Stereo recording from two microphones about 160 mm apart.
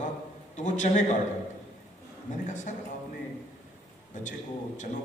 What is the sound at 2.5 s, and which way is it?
Speech, 50° left (ahead or behind).